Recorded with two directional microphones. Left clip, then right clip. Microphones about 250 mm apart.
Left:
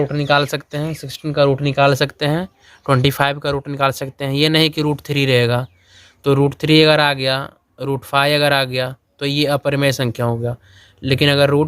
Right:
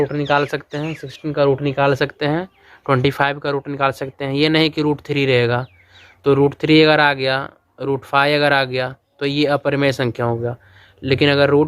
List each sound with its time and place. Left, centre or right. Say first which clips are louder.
0.0 s speech: left 1 dB; left